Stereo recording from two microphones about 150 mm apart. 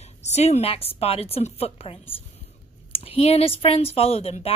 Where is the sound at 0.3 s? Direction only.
45° left (ahead or behind).